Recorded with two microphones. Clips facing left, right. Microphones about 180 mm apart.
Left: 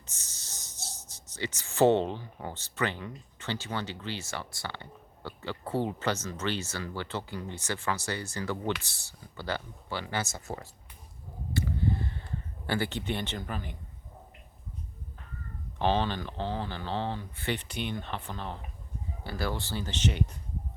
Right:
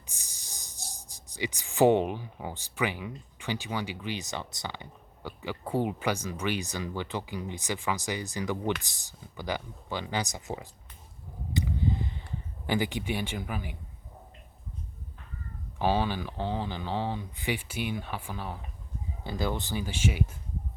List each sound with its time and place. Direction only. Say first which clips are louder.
0.0 s speech: right 1 dB; 15° right (ahead or behind)
11.5 s a sound: right 1 dB; 15° right (ahead or behind)
12.6 s speech: right 2 dB; 15° right (ahead or behind)
15.8 s speech: right 1 dB; 10° right (ahead or behind)
19.2 s speech: right 2 dB; 20° right (ahead or behind)